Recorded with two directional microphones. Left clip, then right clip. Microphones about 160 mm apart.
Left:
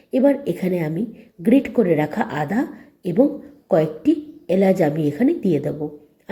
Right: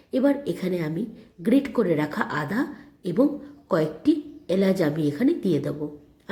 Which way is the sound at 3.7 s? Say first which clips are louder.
Left 5 dB; 15° left (ahead or behind).